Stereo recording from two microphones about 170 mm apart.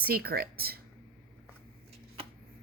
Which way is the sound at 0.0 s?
65° right (ahead or behind).